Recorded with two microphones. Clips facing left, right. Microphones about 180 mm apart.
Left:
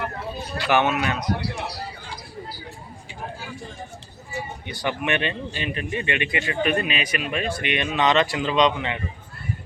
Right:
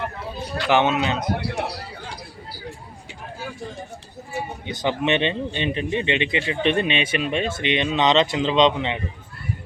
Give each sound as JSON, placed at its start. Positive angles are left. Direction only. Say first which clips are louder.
{"t": 0.7, "sound": "speech", "louder": "right 2 dB", "side_deg": -20}
{"t": 1.2, "sound": "speech", "louder": "right 2 dB", "side_deg": -55}
{"t": 4.6, "sound": "speech", "louder": "right 4 dB", "side_deg": -20}